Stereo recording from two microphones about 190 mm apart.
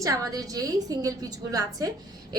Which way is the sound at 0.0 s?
15° right (ahead or behind).